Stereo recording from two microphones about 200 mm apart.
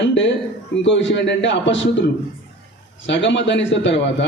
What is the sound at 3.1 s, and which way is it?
Speech, 65° left (ahead or behind).